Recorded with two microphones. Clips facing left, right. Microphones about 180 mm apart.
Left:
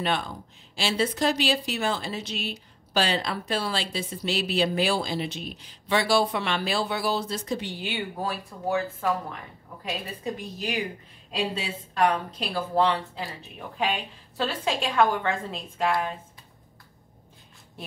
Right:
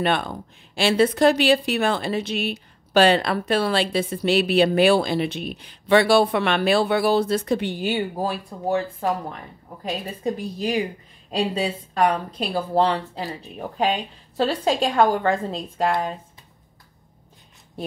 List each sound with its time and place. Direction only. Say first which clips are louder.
0.0 s a woman's voice: right 5 dB; 60° right (ahead or behind); by 15.9 s 35° right (ahead or behind)